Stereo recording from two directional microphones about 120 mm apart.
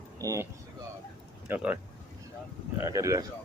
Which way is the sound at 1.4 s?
15° right (ahead or behind).